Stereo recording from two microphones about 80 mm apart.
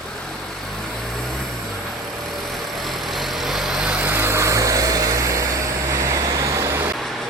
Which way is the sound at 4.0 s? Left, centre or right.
Centre.